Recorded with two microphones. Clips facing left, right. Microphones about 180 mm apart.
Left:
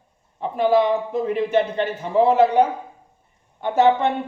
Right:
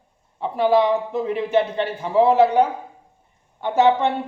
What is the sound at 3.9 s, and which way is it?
Speech, 15° left (ahead or behind).